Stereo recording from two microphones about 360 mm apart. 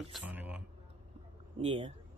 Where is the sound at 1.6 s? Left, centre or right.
Centre.